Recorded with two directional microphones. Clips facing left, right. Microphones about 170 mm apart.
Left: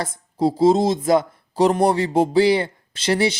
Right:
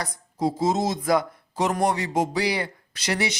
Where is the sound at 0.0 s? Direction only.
30° left (ahead or behind).